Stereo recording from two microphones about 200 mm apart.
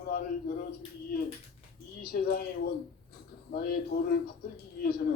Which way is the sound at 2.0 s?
50° left (ahead or behind).